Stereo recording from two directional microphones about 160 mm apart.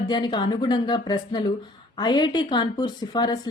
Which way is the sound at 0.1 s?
25° left (ahead or behind).